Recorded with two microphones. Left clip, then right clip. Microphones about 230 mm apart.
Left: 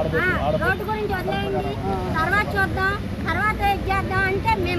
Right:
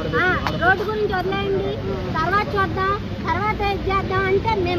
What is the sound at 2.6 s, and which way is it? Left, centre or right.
Speech, centre.